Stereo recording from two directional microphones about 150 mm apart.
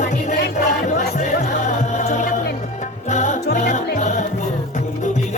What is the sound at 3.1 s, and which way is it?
Music, 55° left (ahead or behind).